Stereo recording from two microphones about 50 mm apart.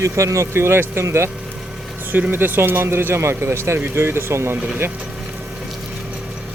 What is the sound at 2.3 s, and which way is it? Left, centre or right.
Speech, right.